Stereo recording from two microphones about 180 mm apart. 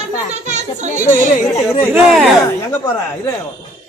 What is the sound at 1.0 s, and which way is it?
Speech, 10° left (ahead or behind).